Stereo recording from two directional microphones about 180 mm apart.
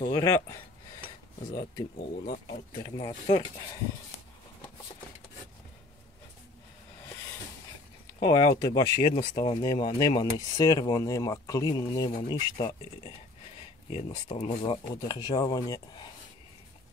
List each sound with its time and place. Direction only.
0.0 s speech: 20° left (ahead or behind)
2.0 s speech: 45° left (ahead or behind)
2.8 s speech: 25° left (ahead or behind)
8.2 s speech: 20° left (ahead or behind)
13.9 s speech: 35° left (ahead or behind)
14.6 s speech: 25° left (ahead or behind)